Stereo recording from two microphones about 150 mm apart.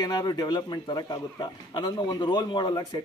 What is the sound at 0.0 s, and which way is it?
A man's voice, 25° left (ahead or behind).